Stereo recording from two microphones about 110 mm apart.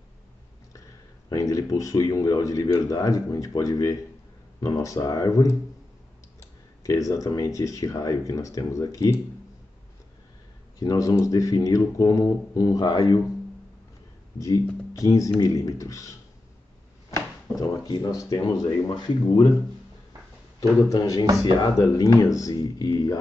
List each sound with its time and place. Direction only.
1.3 s speech: 30° left (ahead or behind)
6.8 s speech: 30° left (ahead or behind)
10.8 s speech: 35° left (ahead or behind)
15.0 s speech: 30° left (ahead or behind)
20.9 s speech: 35° left (ahead or behind)